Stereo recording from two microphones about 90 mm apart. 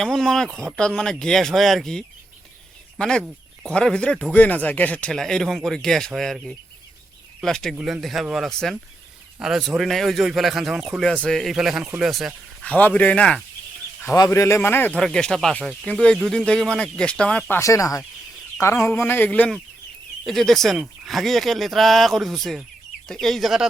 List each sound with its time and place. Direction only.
0.0 s speech: 5° left (ahead or behind)
7.4 s speech: 5° left (ahead or behind)
7.8 s speech: 5° right (ahead or behind)
11.1 s speech: 10° left (ahead or behind)
12.6 s speech: 15° left (ahead or behind)
14.3 s speech: 30° left (ahead or behind)
14.9 s speech: 5° left (ahead or behind)
17.6 s speech: 40° left (ahead or behind); by 19.5 s 15° left (ahead or behind)
20.2 s speech: 5° left (ahead or behind)
20.7 s speech: 15° right (ahead or behind)
21.1 s speech: centre (ahead or behind)